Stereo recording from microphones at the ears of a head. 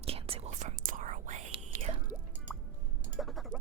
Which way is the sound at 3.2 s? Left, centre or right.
Centre.